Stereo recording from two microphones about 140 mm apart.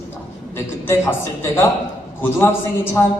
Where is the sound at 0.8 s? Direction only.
15° left (ahead or behind).